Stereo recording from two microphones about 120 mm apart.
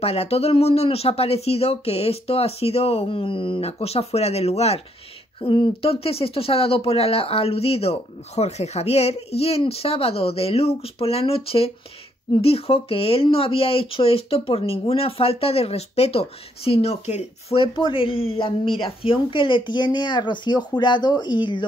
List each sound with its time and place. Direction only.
0.0 s speech: 60° left (ahead or behind)
5.4 s speech: 45° left (ahead or behind)